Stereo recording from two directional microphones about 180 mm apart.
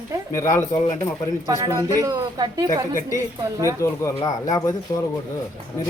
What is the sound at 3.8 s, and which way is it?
Speech, 15° left (ahead or behind).